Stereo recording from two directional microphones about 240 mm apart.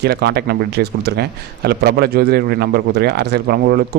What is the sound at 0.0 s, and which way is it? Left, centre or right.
A man's voice, right.